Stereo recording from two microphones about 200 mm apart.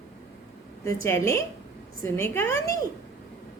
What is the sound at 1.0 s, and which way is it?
A woman's voice, 15° left (ahead or behind).